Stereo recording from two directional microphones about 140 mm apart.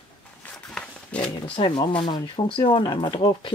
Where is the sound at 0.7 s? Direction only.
5° left (ahead or behind).